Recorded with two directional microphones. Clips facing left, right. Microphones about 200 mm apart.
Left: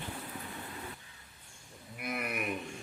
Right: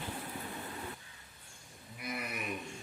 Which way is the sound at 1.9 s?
55° left (ahead or behind).